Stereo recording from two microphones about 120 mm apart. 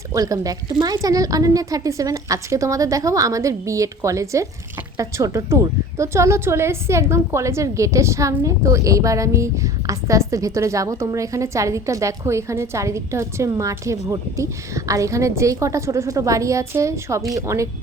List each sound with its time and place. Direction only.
0.1 s a woman's voice: 30° right (ahead or behind)